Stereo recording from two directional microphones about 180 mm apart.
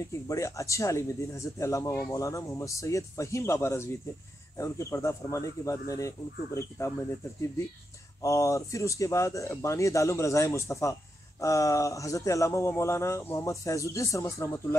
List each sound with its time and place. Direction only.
0.3 s speech: 15° left (ahead or behind)
8.2 s speech: 15° left (ahead or behind)